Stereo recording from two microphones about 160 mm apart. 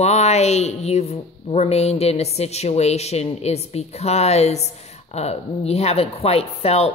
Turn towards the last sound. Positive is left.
turn(degrees=40)  # may be behind; listen again after turning